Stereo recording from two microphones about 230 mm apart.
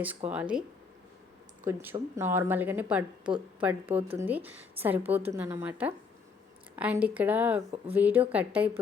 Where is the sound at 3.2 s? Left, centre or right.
Right.